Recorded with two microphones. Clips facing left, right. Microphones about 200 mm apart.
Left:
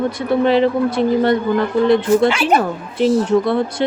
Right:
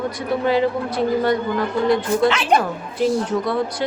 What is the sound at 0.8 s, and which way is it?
A woman's voice, 25° left (ahead or behind).